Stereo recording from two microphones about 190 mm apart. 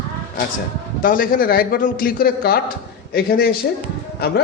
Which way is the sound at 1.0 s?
45° left (ahead or behind).